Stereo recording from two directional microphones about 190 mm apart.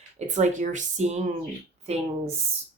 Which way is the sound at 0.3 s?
40° right (ahead or behind).